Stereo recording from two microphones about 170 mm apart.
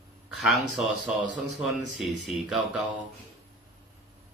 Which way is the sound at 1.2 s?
90° right.